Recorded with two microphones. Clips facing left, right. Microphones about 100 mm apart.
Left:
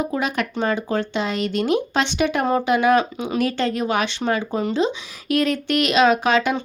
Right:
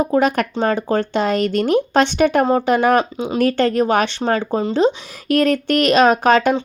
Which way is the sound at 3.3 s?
45° right (ahead or behind).